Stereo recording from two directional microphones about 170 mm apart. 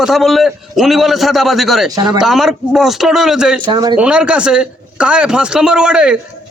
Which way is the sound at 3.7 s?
25° right (ahead or behind).